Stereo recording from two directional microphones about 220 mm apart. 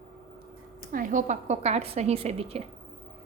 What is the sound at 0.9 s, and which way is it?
A woman's voice, 35° right (ahead or behind).